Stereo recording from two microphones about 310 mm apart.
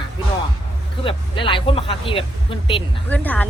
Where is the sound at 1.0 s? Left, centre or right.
Centre.